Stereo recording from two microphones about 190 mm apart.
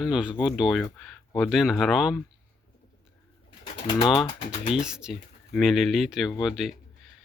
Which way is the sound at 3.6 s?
25° left (ahead or behind).